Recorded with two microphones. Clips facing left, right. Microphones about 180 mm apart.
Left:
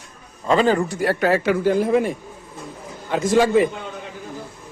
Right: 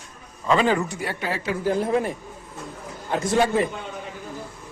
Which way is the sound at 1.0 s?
55° left (ahead or behind).